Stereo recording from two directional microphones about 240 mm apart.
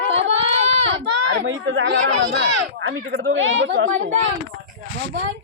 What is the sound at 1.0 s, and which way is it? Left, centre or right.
Speech, right.